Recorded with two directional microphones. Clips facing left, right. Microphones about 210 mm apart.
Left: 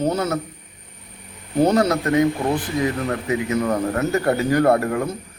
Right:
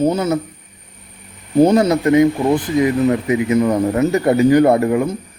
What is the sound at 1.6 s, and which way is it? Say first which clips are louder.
A man's voice: right 4 dB; 15° right (ahead or behind).